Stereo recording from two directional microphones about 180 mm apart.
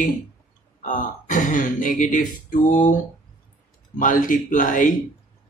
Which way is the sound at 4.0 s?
45° left (ahead or behind).